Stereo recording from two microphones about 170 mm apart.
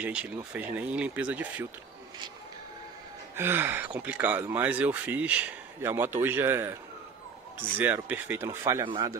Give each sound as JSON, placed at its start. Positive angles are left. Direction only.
{"t": 0.0, "sound": "speech", "side_deg": -5}
{"t": 3.3, "sound": "speech", "side_deg": -15}
{"t": 7.8, "sound": "speech", "side_deg": -10}